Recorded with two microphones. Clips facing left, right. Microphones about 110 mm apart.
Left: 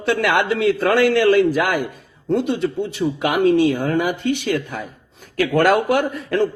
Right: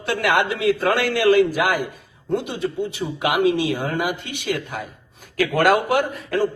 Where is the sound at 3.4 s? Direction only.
50° left (ahead or behind).